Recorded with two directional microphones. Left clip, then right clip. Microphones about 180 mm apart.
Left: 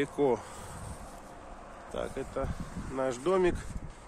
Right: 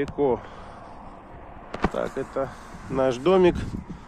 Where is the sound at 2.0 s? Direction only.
30° right (ahead or behind).